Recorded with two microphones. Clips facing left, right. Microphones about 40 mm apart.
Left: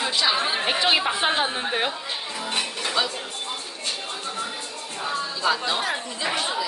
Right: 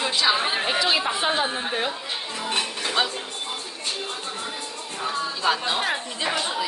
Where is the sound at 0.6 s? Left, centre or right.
Left.